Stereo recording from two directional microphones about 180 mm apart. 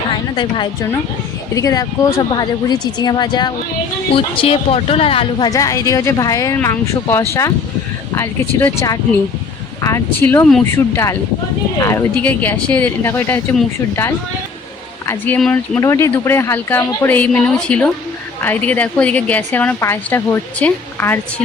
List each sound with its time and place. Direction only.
0.1 s a woman's voice: 25° left (ahead or behind); by 15.8 s 5° left (ahead or behind)
15.8 s a woman's voice: 15° left (ahead or behind)